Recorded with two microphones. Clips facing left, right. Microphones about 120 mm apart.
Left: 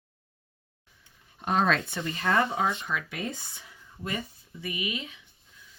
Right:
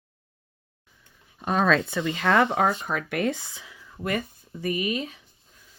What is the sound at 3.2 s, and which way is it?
Speech, 90° right.